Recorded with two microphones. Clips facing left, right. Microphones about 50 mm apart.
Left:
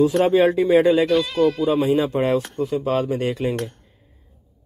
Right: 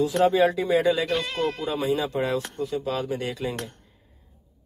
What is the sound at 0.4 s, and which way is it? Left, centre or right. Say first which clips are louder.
Speech: left 5 dB; left.